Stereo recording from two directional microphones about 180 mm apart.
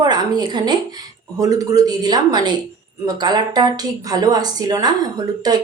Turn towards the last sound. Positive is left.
turn(degrees=-20)  # may be behind; listen again after turning